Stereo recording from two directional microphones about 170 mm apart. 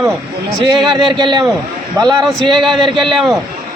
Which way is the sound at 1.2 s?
30° right (ahead or behind).